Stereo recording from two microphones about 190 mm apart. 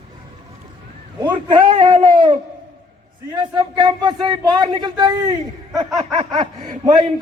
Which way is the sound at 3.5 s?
25° right (ahead or behind).